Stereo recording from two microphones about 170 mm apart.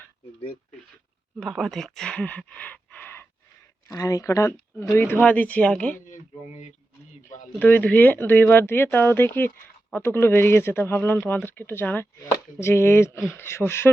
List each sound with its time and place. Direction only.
1.4 s speech: centre (ahead or behind)
7.6 s speech: 10° left (ahead or behind)